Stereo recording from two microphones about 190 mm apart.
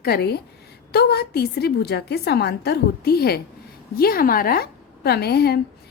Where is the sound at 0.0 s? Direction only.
55° left (ahead or behind).